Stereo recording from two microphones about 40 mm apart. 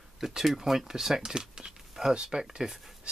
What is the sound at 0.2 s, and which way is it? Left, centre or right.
Speech, centre.